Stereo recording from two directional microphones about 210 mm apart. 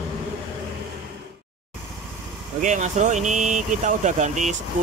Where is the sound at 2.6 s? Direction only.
35° right (ahead or behind).